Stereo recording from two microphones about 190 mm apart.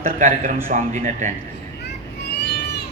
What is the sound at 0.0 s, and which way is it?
A man's voice, 40° right (ahead or behind).